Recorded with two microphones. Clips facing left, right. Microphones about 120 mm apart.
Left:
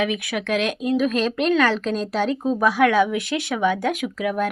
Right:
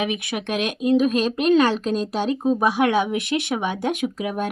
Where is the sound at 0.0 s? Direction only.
20° right (ahead or behind).